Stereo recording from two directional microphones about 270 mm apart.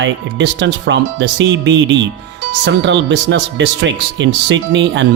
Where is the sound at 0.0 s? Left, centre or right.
Right.